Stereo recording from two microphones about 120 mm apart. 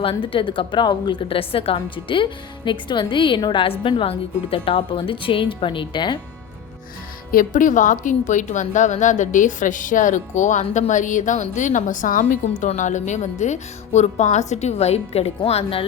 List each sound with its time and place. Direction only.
0.0 s a woman's voice: 45° left (ahead or behind)
7.5 s a woman's voice: 90° left; by 15.8 s 55° left (ahead or behind)